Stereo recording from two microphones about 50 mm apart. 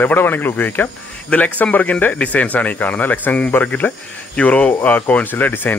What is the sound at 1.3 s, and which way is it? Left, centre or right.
Speech, left.